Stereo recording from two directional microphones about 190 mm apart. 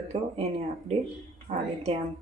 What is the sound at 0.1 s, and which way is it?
Speech, 30° right (ahead or behind).